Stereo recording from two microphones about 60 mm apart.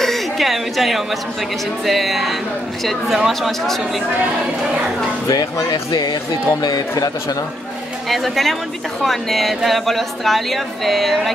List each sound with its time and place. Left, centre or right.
0.0 s a sound: centre
1.9 s speech: centre
5.3 s speech: left
8.1 s speech: centre